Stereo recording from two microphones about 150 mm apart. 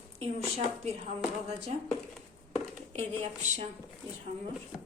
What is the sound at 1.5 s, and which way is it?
Speech, 45° right (ahead or behind).